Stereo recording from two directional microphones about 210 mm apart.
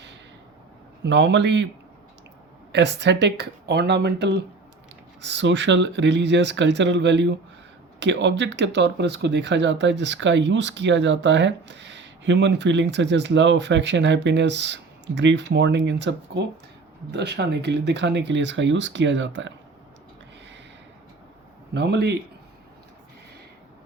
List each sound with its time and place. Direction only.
1.0 s speech: 55° right (ahead or behind)
2.7 s speech: 55° right (ahead or behind)
21.7 s a man's voice: 55° right (ahead or behind)